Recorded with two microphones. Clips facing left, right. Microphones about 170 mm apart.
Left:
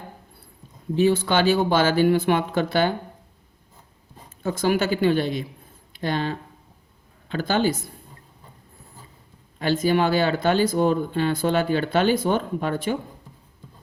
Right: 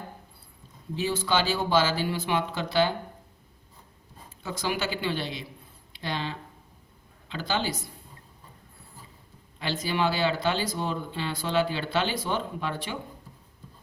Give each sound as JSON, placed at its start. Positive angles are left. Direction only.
{"t": 0.9, "sound": "speech", "side_deg": 55}
{"t": 4.4, "sound": "speech", "side_deg": 50}
{"t": 9.6, "sound": "speech", "side_deg": 50}